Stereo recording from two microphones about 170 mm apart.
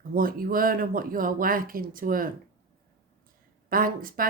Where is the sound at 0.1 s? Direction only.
55° right (ahead or behind).